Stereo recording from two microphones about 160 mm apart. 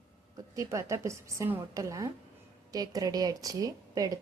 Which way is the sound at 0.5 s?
20° right (ahead or behind).